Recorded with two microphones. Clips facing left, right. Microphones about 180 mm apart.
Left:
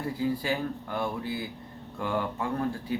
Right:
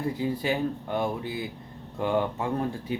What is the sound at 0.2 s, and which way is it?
Speech, 20° right (ahead or behind).